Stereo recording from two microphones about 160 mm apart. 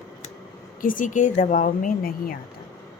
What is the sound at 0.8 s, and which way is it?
Speech, 55° left (ahead or behind).